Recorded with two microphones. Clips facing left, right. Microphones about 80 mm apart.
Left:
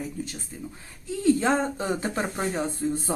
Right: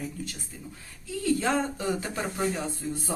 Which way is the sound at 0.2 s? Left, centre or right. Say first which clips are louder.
Left 4 dB; left.